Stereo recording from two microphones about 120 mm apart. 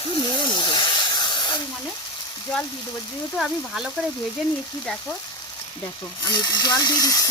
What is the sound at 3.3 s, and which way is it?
Speech, centre (ahead or behind).